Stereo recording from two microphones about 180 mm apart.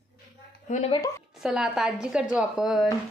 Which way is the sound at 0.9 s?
20° left (ahead or behind).